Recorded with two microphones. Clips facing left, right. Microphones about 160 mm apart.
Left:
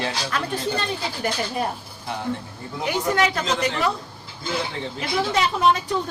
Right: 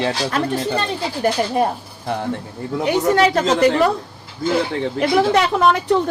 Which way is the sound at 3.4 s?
50° right (ahead or behind).